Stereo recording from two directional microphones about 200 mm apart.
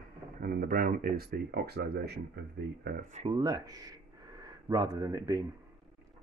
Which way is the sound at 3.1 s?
30° right (ahead or behind).